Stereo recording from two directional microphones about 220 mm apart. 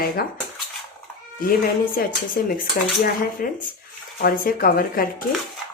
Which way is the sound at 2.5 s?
40° left (ahead or behind).